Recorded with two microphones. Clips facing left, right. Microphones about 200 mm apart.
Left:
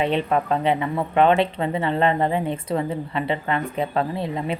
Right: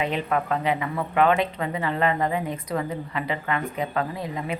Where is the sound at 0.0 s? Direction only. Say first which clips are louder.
Left 4 dB; 30° left (ahead or behind).